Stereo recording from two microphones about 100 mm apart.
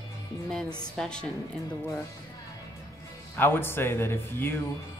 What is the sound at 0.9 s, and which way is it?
Speech, 10° left (ahead or behind).